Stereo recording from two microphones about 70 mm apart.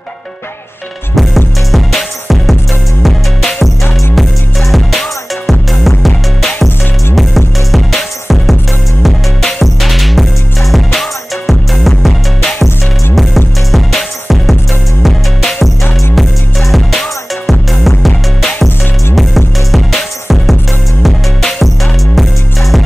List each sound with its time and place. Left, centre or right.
1.7 s music: centre